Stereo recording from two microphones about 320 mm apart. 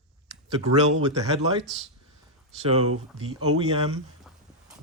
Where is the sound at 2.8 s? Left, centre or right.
Right.